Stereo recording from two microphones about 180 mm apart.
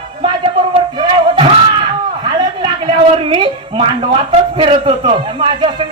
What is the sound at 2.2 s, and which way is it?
A woman's voice, 30° right (ahead or behind).